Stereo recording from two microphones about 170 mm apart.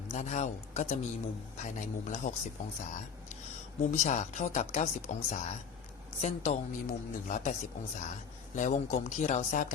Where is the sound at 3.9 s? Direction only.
45° left (ahead or behind).